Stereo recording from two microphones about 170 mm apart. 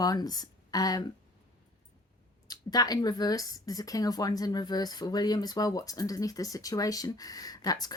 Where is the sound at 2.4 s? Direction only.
25° left (ahead or behind).